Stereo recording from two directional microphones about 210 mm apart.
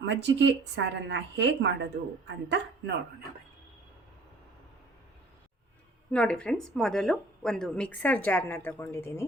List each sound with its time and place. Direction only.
0.0 s speech: 55° right (ahead or behind)
6.1 s speech: 5° left (ahead or behind)